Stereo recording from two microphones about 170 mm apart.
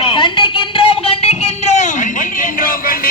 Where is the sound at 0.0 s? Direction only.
30° left (ahead or behind).